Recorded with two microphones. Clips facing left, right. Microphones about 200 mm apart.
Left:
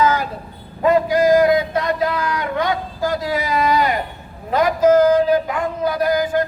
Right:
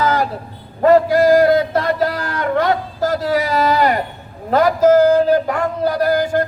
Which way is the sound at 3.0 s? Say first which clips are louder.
Right 3 dB; 40° right (ahead or behind).